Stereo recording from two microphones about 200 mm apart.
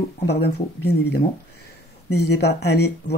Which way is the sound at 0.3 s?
55° left (ahead or behind).